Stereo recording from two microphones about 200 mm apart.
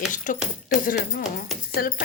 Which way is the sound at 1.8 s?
50° left (ahead or behind).